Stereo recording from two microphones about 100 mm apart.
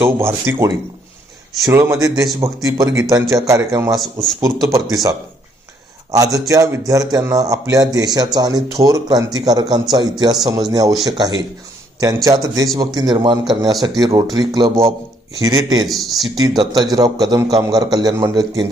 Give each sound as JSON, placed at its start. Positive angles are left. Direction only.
{"t": 0.0, "sound": "speech", "side_deg": -25}
{"t": 1.6, "sound": "speech", "side_deg": -30}
{"t": 6.1, "sound": "speech", "side_deg": -35}
{"t": 15.9, "sound": "speech", "side_deg": 0}
{"t": 16.3, "sound": "speech", "side_deg": -45}